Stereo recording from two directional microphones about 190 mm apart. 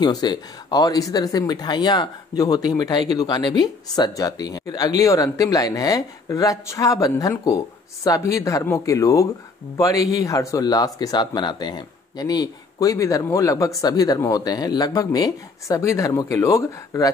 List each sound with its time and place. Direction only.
0.0 s speech: 20° left (ahead or behind)